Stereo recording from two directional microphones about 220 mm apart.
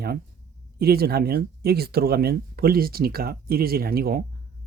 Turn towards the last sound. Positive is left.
turn(degrees=-45)  # may be behind; listen again after turning